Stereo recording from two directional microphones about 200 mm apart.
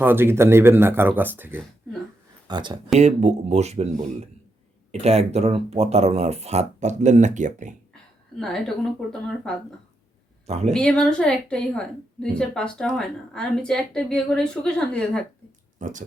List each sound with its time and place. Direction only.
0.0 s speech: 10° right (ahead or behind)
2.5 s speech: 25° right (ahead or behind)
3.0 s speech: 35° right (ahead or behind)
8.4 s a woman's voice: centre (ahead or behind)
10.4 s speech: 30° right (ahead or behind)
10.7 s a woman's voice: 5° left (ahead or behind)
15.8 s speech: 40° right (ahead or behind)